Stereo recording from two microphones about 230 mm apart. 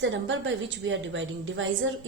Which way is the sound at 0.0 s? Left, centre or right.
Right.